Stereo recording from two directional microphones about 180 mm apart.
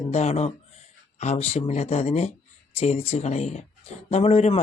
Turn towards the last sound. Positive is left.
turn(degrees=40)  # may be behind; listen again after turning